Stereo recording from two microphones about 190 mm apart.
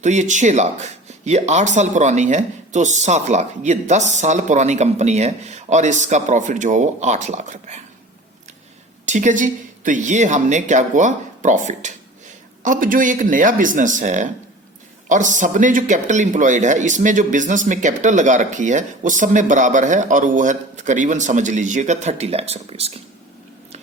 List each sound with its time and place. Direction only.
0.0 s a man's voice: 40° right (ahead or behind)
9.0 s a man's voice: 40° right (ahead or behind)